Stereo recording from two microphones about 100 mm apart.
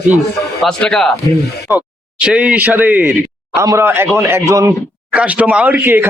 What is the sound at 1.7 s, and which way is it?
Speech, 15° right (ahead or behind).